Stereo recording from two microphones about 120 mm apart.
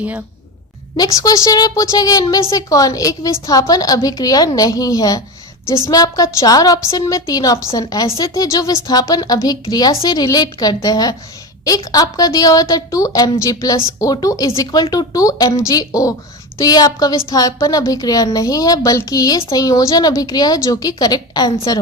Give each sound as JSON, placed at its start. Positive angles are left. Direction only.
{"t": 0.9, "sound": "a woman's voice", "side_deg": 30}